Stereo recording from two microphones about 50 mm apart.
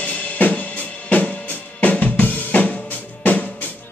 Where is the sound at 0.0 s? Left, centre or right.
Left.